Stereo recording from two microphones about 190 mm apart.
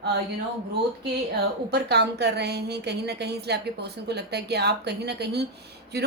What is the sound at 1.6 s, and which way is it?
A woman's voice, 60° right (ahead or behind).